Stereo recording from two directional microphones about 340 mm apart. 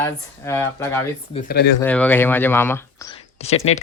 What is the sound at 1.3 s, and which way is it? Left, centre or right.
Speech, left.